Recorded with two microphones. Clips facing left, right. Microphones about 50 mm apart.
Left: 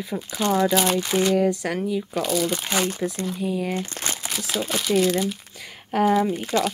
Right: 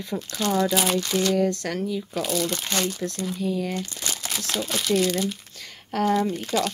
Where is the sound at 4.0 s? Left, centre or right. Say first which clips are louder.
Left 3 dB; left.